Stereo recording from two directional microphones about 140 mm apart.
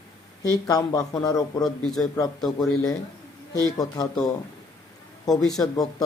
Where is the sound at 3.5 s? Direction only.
25° left (ahead or behind).